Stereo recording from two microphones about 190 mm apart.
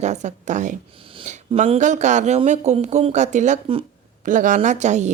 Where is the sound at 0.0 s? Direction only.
40° right (ahead or behind).